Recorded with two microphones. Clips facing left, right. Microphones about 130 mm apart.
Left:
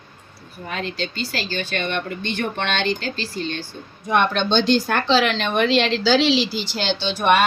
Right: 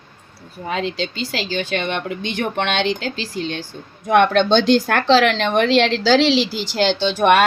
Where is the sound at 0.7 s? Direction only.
90° right.